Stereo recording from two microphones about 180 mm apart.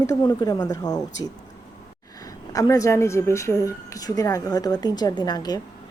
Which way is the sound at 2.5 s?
20° left (ahead or behind).